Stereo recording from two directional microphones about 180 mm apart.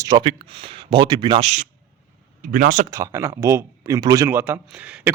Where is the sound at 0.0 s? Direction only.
25° right (ahead or behind).